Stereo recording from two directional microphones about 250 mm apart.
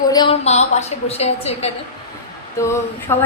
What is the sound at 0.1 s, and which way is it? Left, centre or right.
A woman's voice, centre.